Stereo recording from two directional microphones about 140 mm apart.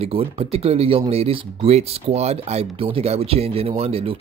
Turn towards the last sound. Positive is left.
turn(degrees=-45)  # may be behind; listen again after turning